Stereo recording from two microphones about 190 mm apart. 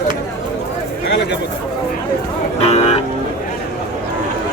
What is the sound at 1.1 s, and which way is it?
Speech, 65° left (ahead or behind).